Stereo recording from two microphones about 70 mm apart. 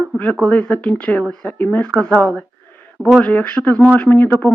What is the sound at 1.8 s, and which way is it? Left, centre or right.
Speech, centre.